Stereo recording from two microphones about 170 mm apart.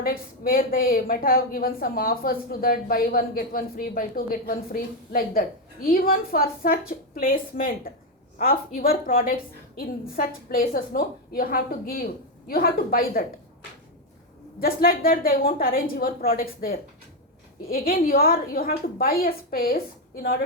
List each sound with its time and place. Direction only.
0.0 s a woman's voice: 60° left (ahead or behind)
14.6 s a woman's voice: 60° left (ahead or behind)